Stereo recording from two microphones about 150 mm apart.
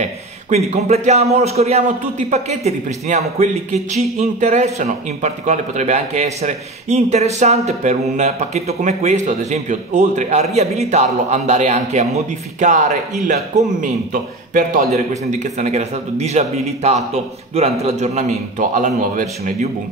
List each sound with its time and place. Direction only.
0.0 s a man's voice: 50° right (ahead or behind)